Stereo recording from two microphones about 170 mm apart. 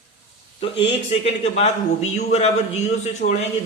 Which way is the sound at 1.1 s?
40° left (ahead or behind).